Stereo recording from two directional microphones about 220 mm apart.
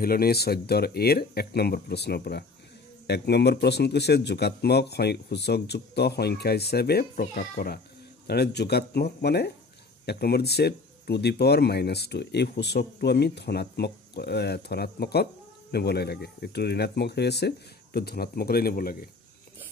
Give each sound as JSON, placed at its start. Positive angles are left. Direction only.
{"t": 0.0, "sound": "speech", "side_deg": 45}